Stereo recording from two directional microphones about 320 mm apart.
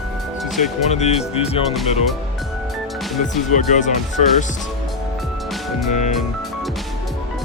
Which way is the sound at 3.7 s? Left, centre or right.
Left.